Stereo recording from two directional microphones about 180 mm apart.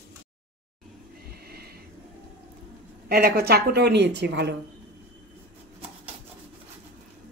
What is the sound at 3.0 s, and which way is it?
A woman's voice, 60° right (ahead or behind).